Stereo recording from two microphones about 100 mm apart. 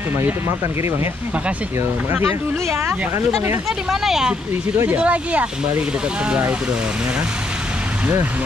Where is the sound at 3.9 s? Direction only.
5° right (ahead or behind).